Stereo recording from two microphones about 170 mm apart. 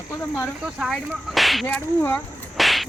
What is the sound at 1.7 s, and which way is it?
Speech, 10° left (ahead or behind).